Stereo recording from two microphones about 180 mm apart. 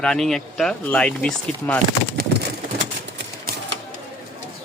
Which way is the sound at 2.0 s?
65° right (ahead or behind).